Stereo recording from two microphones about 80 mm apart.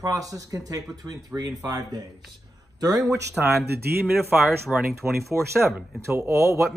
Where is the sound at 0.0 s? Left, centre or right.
Right.